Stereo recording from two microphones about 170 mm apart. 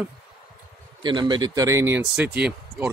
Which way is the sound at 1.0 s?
25° right (ahead or behind).